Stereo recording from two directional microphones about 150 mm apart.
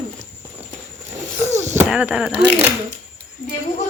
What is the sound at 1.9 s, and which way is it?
Speech, 5° right (ahead or behind).